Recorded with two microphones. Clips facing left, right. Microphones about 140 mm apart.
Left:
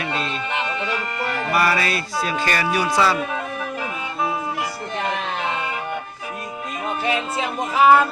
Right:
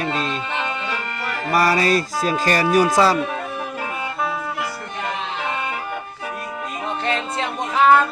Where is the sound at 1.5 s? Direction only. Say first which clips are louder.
Right 4 dB; 35° right (ahead or behind).